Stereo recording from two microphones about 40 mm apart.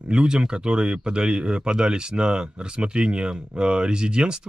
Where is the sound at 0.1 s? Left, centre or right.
Centre.